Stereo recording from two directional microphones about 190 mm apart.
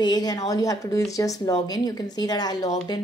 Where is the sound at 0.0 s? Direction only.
20° left (ahead or behind).